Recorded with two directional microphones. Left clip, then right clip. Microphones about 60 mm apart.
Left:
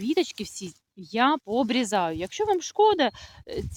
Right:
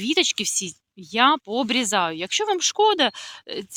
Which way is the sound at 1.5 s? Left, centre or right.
Left.